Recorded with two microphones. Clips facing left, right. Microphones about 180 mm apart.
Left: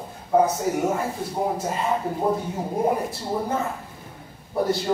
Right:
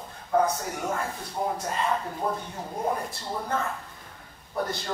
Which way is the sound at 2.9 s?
10° left (ahead or behind).